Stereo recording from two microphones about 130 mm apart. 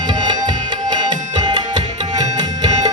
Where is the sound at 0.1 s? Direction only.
35° right (ahead or behind).